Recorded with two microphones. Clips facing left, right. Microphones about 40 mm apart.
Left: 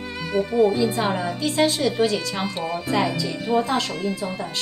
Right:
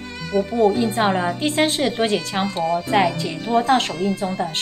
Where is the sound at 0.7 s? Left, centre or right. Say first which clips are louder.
Right 3 dB; right.